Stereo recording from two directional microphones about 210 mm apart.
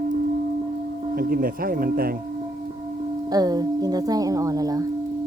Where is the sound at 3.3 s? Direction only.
20° right (ahead or behind).